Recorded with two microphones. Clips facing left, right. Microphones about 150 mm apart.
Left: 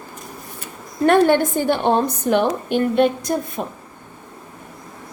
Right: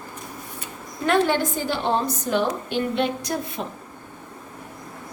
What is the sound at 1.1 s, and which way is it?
A woman's voice, 55° left (ahead or behind).